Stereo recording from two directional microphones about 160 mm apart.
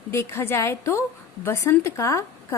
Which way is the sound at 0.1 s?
15° left (ahead or behind).